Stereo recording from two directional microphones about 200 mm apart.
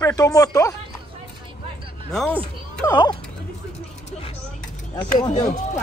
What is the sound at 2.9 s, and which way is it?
Speech, 20° left (ahead or behind).